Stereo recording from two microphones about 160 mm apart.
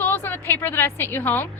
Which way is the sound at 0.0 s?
10° left (ahead or behind).